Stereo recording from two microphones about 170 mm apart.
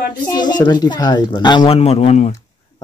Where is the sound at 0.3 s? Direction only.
25° left (ahead or behind).